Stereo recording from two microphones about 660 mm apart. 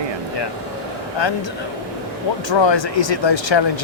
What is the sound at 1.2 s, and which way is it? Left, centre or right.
Speech, left.